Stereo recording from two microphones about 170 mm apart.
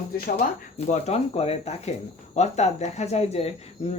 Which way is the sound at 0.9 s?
40° left (ahead or behind).